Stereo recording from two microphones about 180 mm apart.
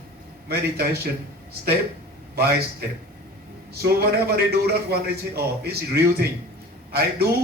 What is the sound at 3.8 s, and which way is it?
A man's voice, 60° right (ahead or behind).